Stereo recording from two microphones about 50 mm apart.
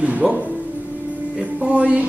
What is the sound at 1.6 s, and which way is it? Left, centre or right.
Speech, right.